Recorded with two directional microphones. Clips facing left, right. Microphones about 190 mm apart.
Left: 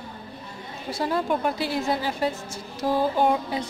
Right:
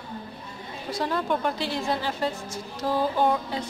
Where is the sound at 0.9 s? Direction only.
10° left (ahead or behind).